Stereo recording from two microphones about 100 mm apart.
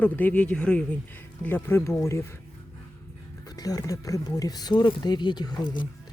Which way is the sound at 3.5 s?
40° left (ahead or behind).